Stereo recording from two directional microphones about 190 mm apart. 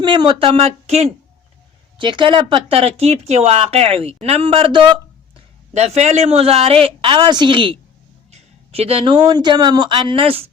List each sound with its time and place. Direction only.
0.0 s a woman's voice: 25° right (ahead or behind)